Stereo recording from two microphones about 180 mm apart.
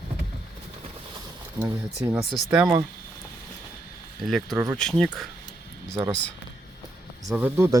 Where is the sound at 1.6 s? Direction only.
10° right (ahead or behind).